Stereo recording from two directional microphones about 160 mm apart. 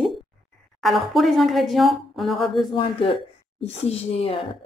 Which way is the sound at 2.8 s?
35° left (ahead or behind).